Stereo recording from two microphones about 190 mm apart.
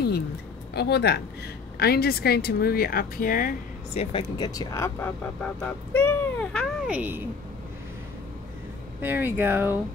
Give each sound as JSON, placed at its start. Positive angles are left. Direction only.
{"t": 0.7, "sound": "speech", "side_deg": 60}
{"t": 4.0, "sound": "speech", "side_deg": 25}
{"t": 6.9, "sound": "speech", "side_deg": -10}
{"t": 9.0, "sound": "speech", "side_deg": -10}